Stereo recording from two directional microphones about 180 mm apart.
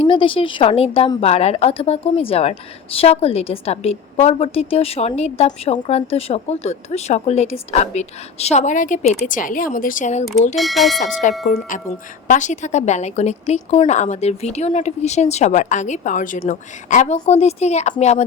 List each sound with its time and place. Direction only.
0.0 s a woman's voice: 30° left (ahead or behind)
10.5 s speech: centre (ahead or behind)
11.0 s a woman's voice: 40° left (ahead or behind)